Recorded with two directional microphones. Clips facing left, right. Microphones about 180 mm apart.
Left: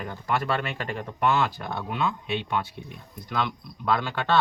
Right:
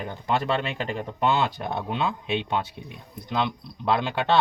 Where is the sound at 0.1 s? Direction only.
20° right (ahead or behind).